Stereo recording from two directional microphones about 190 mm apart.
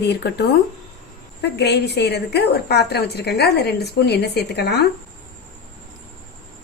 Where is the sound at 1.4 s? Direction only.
60° left (ahead or behind).